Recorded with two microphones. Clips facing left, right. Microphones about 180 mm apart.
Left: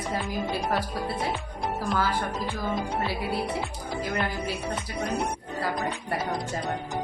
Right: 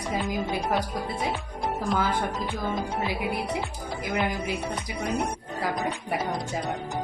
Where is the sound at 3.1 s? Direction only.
15° right (ahead or behind).